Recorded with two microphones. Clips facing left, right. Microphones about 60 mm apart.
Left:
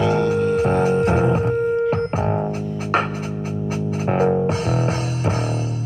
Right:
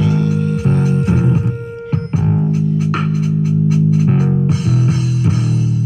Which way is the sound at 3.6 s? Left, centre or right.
Left.